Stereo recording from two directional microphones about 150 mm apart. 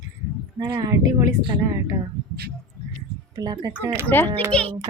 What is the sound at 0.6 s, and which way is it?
A woman's voice, 20° right (ahead or behind).